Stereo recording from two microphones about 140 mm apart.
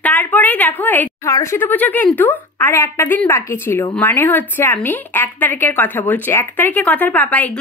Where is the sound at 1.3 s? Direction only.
20° left (ahead or behind).